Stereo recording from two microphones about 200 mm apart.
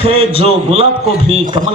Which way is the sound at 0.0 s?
30° right (ahead or behind).